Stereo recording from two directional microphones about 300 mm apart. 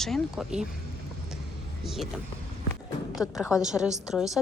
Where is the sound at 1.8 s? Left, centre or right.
Centre.